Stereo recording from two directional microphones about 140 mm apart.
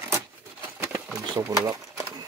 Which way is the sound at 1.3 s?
20° right (ahead or behind).